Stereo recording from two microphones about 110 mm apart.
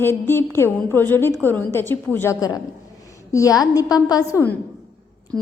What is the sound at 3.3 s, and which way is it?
A woman's voice, 30° left (ahead or behind).